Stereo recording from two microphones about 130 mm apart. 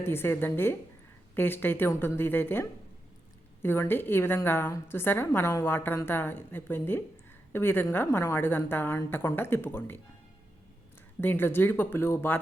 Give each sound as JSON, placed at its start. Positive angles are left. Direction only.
{"t": 0.0, "sound": "a woman's voice", "side_deg": 15}
{"t": 11.2, "sound": "a woman's voice", "side_deg": 15}